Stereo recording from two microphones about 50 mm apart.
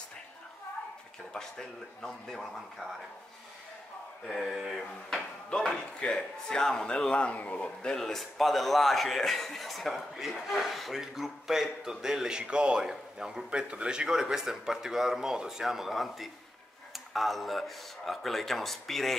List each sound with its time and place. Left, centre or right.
1.3 s speech: centre
4.4 s speech: centre
5.1 s a man's voice: centre; by 7.7 s left
7.8 s a man's voice: centre